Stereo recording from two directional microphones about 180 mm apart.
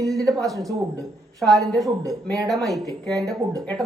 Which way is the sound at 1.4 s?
Centre (ahead or behind).